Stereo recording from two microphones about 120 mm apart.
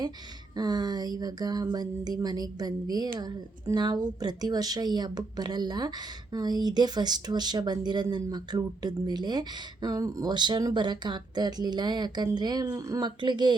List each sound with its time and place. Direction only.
0.5 s speech: 35° right (ahead or behind)